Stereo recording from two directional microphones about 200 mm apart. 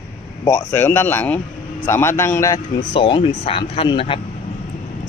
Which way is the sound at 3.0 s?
25° left (ahead or behind).